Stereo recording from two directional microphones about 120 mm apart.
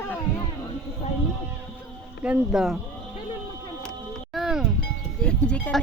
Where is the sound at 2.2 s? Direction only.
10° right (ahead or behind).